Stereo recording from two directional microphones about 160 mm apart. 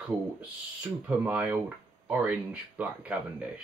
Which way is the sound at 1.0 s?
10° right (ahead or behind).